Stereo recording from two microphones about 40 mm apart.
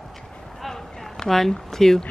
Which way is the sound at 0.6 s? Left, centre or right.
Centre.